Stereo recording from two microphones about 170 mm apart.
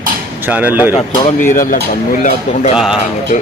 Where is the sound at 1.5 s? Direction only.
55° left (ahead or behind).